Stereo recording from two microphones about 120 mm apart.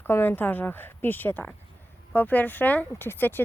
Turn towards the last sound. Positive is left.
turn(degrees=15)  # may be behind; listen again after turning